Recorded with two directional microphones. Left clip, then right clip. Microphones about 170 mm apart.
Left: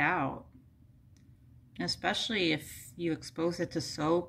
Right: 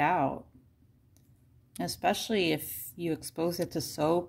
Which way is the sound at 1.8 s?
40° right (ahead or behind).